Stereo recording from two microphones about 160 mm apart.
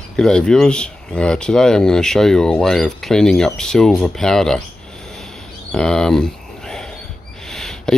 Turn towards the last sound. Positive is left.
turn(degrees=5)  # may be behind; listen again after turning